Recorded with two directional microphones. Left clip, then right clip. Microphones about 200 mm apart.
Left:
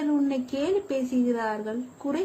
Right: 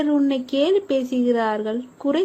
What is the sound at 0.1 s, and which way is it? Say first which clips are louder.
A woman's voice: right 6 dB; 25° right (ahead or behind).